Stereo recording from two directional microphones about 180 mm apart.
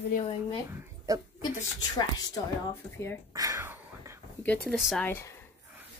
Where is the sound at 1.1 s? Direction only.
20° right (ahead or behind).